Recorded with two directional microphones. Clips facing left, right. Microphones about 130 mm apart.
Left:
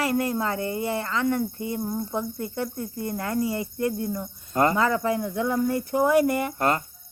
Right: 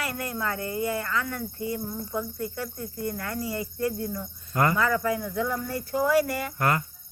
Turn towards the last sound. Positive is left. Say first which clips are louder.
# left 3 dB
turn(degrees=25)  # may be behind; listen again after turning